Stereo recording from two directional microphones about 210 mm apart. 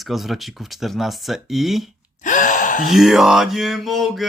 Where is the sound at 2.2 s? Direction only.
40° left (ahead or behind).